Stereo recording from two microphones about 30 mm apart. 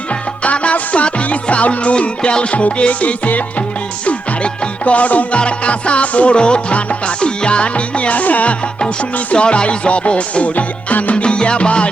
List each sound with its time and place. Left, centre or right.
0.1 s music: left
4.4 s music: left
4.9 s music: left
5.4 s music: left
6.3 s music: left
9.3 s music: left
10.4 s music: left
11.1 s music: left